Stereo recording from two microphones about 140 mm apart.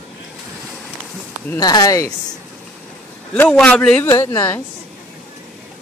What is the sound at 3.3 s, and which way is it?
Speech, 5° left (ahead or behind).